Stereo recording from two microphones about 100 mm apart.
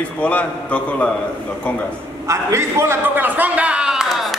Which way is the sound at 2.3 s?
30° right (ahead or behind).